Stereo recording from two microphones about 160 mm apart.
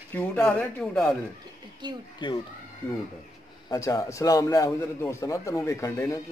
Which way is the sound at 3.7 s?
20° left (ahead or behind).